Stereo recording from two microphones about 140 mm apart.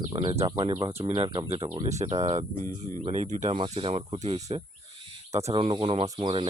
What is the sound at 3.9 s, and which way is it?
Speech, 50° right (ahead or behind).